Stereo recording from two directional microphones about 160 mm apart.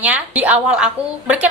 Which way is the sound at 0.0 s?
10° right (ahead or behind).